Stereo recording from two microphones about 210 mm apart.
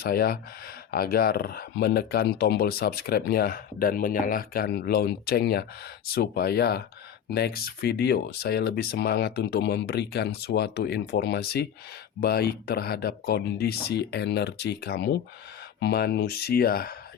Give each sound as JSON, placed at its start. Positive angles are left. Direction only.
{"t": 0.0, "sound": "speech", "side_deg": 45}